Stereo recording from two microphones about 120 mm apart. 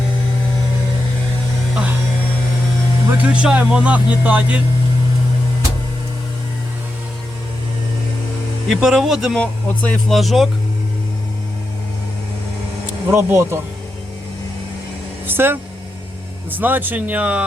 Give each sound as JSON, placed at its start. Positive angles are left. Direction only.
{"t": 1.7, "sound": "a sound", "side_deg": -10}
{"t": 3.1, "sound": "speech", "side_deg": -10}
{"t": 8.6, "sound": "speech", "side_deg": 0}
{"t": 9.4, "sound": "speech", "side_deg": 10}
{"t": 10.2, "sound": "speech", "side_deg": 0}
{"t": 13.1, "sound": "speech", "side_deg": -20}
{"t": 15.3, "sound": "speech", "side_deg": -20}